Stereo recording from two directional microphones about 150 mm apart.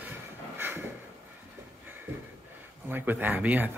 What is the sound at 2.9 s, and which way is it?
Speech, 10° right (ahead or behind).